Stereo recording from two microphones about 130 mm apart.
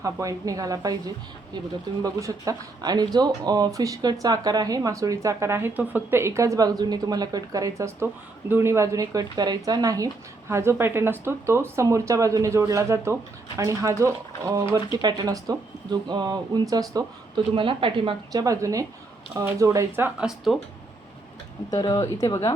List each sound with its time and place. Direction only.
0.0 s speech: 25° right (ahead or behind)
17.5 s speech: 40° right (ahead or behind)
18.3 s speech: 30° right (ahead or behind); by 20.6 s centre (ahead or behind)
21.7 s a woman's voice: 30° left (ahead or behind)